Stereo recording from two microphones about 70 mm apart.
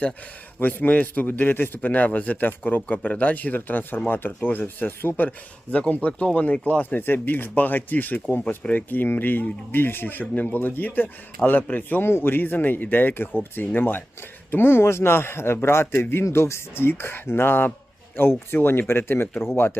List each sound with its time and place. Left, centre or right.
0.6 s a man's voice: left